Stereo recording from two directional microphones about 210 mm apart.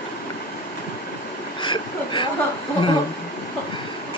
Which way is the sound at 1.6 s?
25° left (ahead or behind).